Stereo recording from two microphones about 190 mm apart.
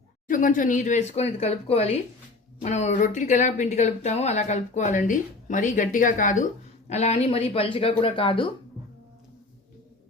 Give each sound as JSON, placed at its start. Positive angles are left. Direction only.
{"t": 0.3, "sound": "speech", "side_deg": 45}